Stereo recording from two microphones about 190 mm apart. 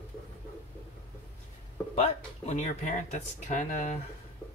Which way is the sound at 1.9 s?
35° left (ahead or behind).